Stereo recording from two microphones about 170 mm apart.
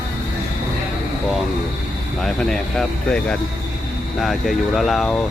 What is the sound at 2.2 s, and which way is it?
Speech, 5° left (ahead or behind).